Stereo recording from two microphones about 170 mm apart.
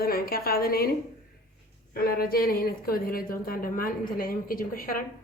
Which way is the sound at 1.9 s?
65° left (ahead or behind).